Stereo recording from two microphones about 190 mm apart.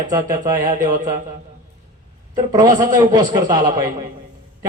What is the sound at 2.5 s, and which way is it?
A man's voice, 20° right (ahead or behind).